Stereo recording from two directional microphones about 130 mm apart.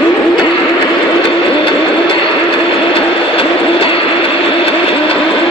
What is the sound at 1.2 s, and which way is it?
Vehicle, 45° left (ahead or behind).